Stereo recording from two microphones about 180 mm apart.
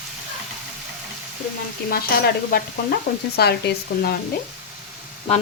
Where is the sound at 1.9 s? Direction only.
55° left (ahead or behind).